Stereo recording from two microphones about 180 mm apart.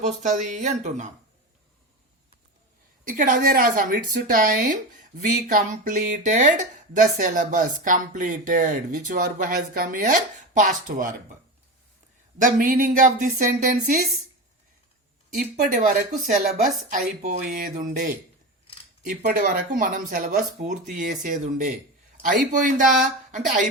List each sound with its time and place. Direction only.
0.0 s speech: 40° right (ahead or behind)
3.0 s a woman's voice: 45° right (ahead or behind)
12.4 s a woman's voice: 50° right (ahead or behind)
15.3 s a woman's voice: 50° right (ahead or behind)
17.2 s a woman's voice: 45° right (ahead or behind)